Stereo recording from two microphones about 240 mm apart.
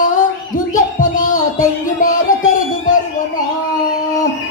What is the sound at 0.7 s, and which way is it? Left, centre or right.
Music, left.